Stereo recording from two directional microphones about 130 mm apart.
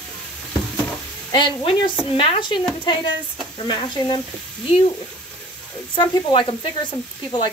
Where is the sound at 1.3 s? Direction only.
35° left (ahead or behind).